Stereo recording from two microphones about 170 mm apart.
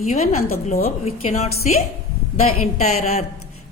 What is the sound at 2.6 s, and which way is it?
Speech, 40° left (ahead or behind).